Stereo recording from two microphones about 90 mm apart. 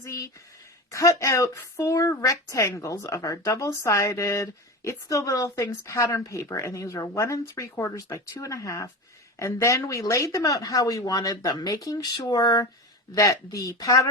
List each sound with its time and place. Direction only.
0.9 s speech: 35° left (ahead or behind)